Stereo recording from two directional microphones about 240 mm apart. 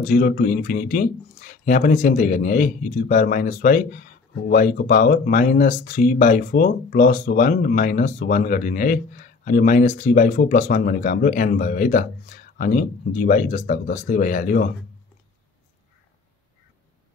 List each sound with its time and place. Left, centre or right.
0.0 s speech: left